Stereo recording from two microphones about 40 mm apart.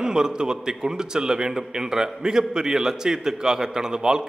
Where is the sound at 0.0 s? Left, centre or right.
Centre.